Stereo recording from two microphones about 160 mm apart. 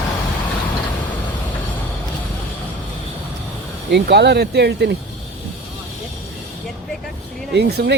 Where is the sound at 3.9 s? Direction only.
90° right.